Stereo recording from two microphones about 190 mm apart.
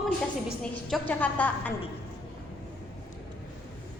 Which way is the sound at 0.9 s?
10° left (ahead or behind).